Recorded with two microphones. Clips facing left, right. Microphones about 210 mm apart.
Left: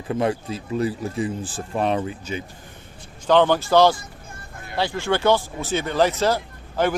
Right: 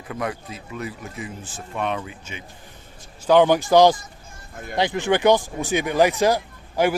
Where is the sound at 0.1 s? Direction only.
30° left (ahead or behind).